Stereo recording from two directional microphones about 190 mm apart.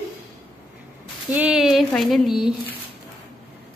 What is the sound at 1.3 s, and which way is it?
A woman's voice, 5° right (ahead or behind).